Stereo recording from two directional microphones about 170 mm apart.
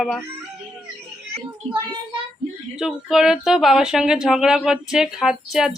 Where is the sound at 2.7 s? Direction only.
5° right (ahead or behind).